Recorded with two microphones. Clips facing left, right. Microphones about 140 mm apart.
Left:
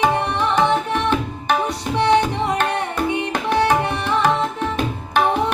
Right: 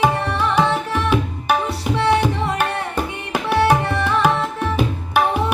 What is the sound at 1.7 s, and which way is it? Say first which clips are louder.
Tabla: even; 20° left (ahead or behind).